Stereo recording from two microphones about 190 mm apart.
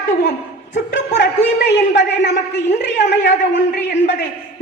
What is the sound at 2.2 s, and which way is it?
A man's voice, 65° left (ahead or behind).